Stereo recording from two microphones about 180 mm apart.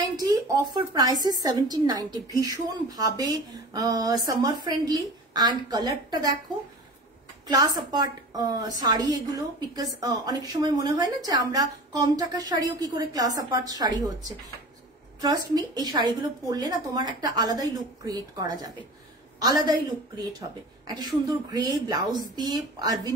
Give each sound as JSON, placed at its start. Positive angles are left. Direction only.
{"t": 0.1, "sound": "a woman's voice", "side_deg": -20}
{"t": 7.4, "sound": "a woman's voice", "side_deg": -20}
{"t": 15.1, "sound": "a woman's voice", "side_deg": -20}